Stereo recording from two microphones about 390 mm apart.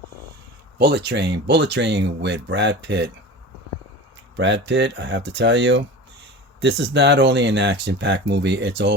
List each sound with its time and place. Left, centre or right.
0.8 s speech: right
4.4 s speech: right